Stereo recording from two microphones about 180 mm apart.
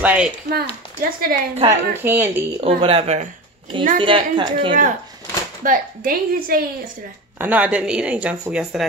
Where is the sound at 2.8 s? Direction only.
30° right (ahead or behind).